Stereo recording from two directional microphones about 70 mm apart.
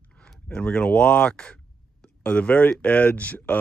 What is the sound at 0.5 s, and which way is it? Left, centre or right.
Speech, centre.